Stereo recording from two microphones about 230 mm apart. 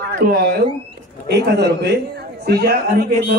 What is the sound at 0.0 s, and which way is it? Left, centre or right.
Speech, right.